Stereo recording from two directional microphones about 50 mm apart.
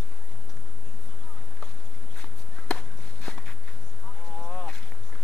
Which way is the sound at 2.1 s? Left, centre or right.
Left.